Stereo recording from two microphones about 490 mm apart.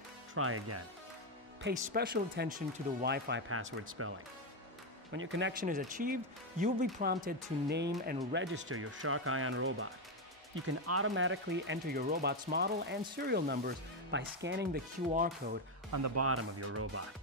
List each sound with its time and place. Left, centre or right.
0.3 s speech: right
1.7 s speech: centre
5.1 s speech: right
15.9 s speech: right